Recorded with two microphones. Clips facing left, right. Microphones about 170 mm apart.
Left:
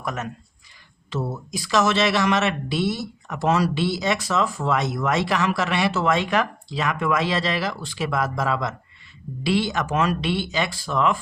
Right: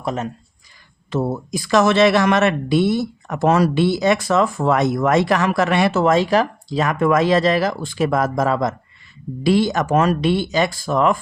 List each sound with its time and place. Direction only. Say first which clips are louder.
0.0 s speech: right 6 dB; 30° right (ahead or behind)
1.1 s speech: right 7 dB; 55° right (ahead or behind)